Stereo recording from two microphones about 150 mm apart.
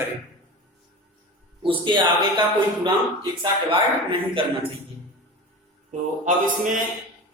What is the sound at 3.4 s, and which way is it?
Speech, 35° right (ahead or behind).